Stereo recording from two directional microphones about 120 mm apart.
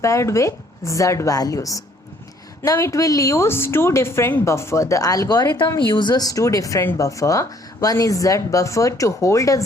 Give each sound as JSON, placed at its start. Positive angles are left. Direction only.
{"t": 0.0, "sound": "a woman's voice", "side_deg": 25}